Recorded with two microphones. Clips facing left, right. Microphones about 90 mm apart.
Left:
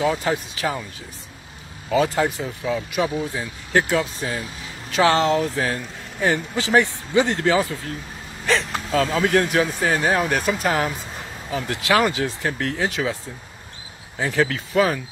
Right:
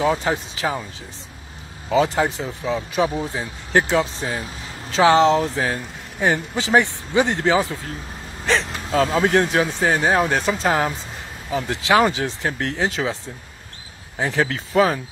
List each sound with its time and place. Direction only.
0.0 s speech: 20° right (ahead or behind)
1.9 s speech: 20° right (ahead or behind)